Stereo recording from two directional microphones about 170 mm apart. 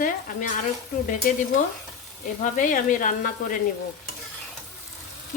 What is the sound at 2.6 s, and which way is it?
Stir, 50° left (ahead or behind).